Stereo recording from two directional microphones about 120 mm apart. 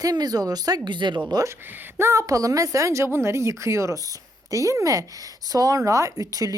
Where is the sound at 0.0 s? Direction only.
35° right (ahead or behind).